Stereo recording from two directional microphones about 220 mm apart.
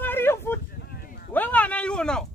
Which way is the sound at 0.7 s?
45° left (ahead or behind).